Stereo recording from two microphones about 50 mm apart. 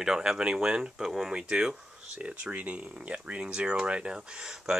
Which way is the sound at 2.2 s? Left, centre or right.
Right.